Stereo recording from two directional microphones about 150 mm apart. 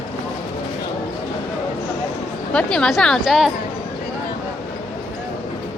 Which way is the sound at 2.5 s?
5° left (ahead or behind).